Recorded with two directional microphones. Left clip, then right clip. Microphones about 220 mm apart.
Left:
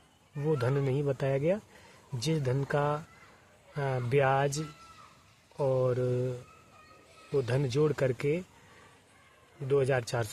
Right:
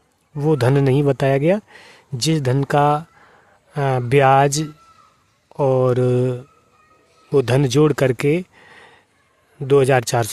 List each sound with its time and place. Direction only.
0.3 s speech: 50° right (ahead or behind)